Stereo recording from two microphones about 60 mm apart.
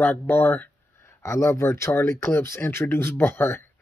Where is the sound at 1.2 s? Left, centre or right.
Left.